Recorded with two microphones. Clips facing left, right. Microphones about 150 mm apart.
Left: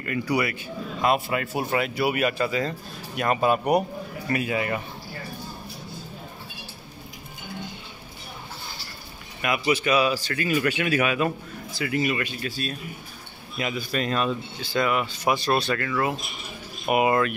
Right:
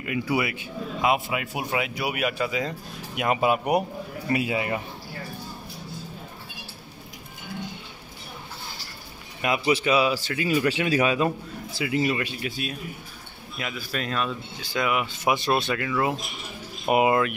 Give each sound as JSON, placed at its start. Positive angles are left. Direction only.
{"t": 0.0, "sound": "speech", "side_deg": -15}
{"t": 9.4, "sound": "speech", "side_deg": -25}
{"t": 10.7, "sound": "speech", "side_deg": -30}
{"t": 13.6, "sound": "speech", "side_deg": 0}
{"t": 14.6, "sound": "speech", "side_deg": -10}